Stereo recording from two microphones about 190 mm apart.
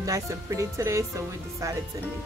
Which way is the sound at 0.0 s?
15° right (ahead or behind).